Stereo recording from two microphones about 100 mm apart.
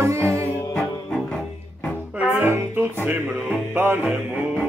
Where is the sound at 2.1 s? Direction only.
20° right (ahead or behind).